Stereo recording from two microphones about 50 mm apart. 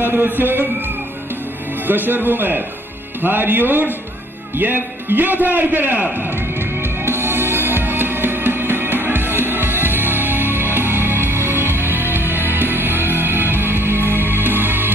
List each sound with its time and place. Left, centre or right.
0.0 s speech: right
1.9 s a man's voice: right
6.8 s music: right